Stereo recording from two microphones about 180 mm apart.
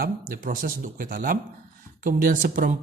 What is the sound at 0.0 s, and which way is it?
Speech, 50° right (ahead or behind).